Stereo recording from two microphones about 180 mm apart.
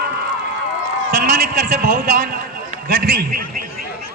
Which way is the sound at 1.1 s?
55° right (ahead or behind).